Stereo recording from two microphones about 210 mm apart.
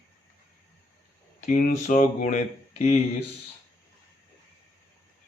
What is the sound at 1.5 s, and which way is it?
Speech, 40° left (ahead or behind).